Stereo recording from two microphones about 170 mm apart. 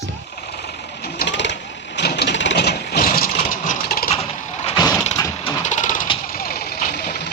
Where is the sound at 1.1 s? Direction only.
90° left.